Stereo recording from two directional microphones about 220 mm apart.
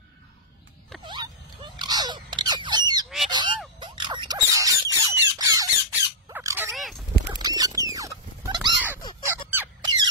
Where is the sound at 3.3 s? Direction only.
20° right (ahead or behind).